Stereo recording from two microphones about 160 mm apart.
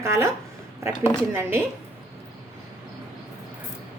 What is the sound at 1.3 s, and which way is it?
Speech, 15° right (ahead or behind).